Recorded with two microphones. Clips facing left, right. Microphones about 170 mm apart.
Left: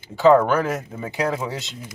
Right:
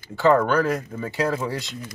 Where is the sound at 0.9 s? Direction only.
15° left (ahead or behind).